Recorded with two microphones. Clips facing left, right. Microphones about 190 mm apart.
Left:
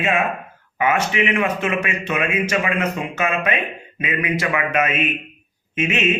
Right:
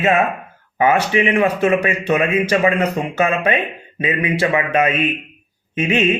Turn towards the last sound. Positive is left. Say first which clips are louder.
# right 4 dB
turn(degrees=-30)  # may be behind; listen again after turning